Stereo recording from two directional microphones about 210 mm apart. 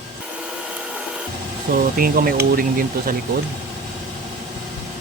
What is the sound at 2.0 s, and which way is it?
Speech, 45° right (ahead or behind).